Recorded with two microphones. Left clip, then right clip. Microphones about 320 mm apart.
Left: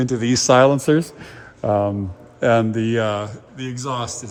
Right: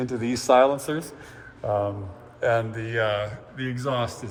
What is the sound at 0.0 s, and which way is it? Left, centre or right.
Speech, left.